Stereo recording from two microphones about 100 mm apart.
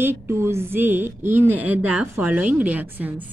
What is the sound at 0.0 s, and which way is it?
Speech, 25° right (ahead or behind).